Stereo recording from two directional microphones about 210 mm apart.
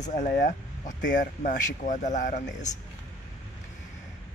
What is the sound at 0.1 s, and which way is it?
Speech, 35° left (ahead or behind).